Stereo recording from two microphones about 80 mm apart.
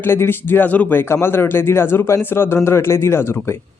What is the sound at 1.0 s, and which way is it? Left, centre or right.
Speech, left.